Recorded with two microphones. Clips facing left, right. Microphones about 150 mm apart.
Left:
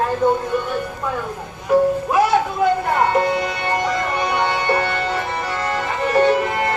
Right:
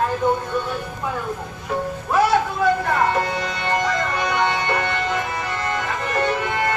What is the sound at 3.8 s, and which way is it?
Music, 25° left (ahead or behind).